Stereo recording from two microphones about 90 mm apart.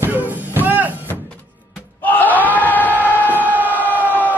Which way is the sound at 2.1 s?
20° left (ahead or behind).